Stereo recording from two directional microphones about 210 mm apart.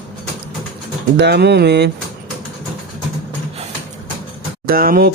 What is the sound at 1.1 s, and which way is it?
Speech, 50° right (ahead or behind).